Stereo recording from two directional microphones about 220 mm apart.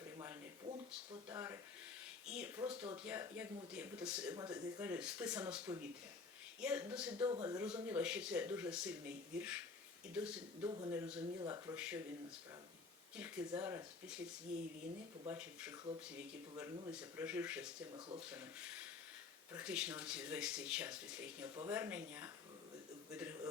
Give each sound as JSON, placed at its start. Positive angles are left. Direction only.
{"t": 1.3, "sound": "speech", "side_deg": -10}
{"t": 2.6, "sound": "speech", "side_deg": -20}
{"t": 3.0, "sound": "speech", "side_deg": -5}
{"t": 4.4, "sound": "speech", "side_deg": -15}
{"t": 7.3, "sound": "speech", "side_deg": -15}
{"t": 10.8, "sound": "speech", "side_deg": -20}
{"t": 11.7, "sound": "speech", "side_deg": -5}
{"t": 13.1, "sound": "speech", "side_deg": -5}
{"t": 15.3, "sound": "speech", "side_deg": -5}
{"t": 21.4, "sound": "speech", "side_deg": -20}
{"t": 21.7, "sound": "a man's voice", "side_deg": -10}